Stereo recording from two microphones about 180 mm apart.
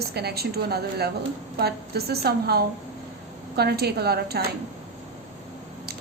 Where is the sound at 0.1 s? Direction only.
65° right (ahead or behind).